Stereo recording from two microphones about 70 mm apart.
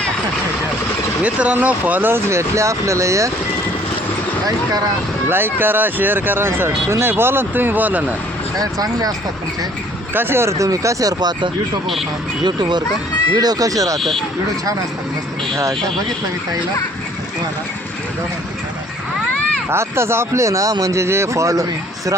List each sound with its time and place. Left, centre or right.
1.2 s speech: centre; by 3.3 s right
5.3 s speech: right
8.5 s speech: right
10.2 s speech: right
10.6 s speech: right
12.5 s speech: right
13.3 s speech: right
19.7 s speech: right